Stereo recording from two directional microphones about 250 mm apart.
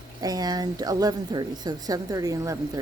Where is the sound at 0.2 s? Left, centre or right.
Centre.